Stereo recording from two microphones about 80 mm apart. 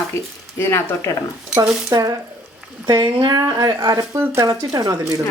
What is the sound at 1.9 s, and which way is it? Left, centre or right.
Speech, right.